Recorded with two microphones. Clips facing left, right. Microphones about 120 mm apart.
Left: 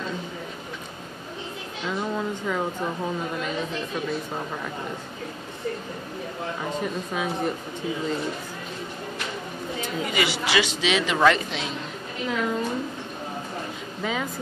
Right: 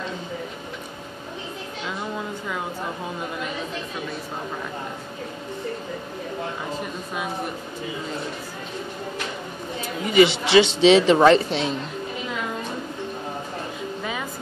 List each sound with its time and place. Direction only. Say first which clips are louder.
10.0 s speech: right 11 dB; 25° right (ahead or behind)